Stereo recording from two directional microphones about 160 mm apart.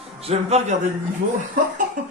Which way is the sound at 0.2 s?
40° right (ahead or behind).